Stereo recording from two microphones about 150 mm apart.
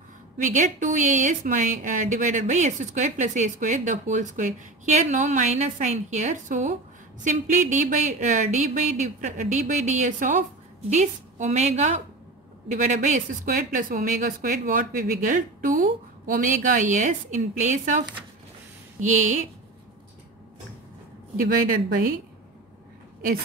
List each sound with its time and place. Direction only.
0.4 s a woman's voice: 55° right (ahead or behind)